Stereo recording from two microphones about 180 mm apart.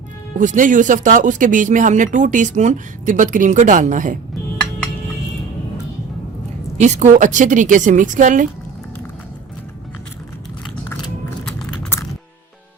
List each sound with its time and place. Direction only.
0.3 s speech: 45° right (ahead or behind)
6.7 s speech: 40° right (ahead or behind)
11.4 s a sound: 5° left (ahead or behind)